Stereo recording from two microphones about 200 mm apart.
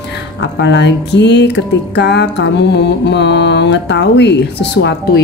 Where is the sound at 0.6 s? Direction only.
60° left (ahead or behind).